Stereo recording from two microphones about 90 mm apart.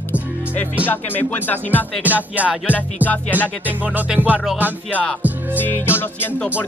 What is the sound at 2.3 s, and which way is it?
Music, 15° right (ahead or behind).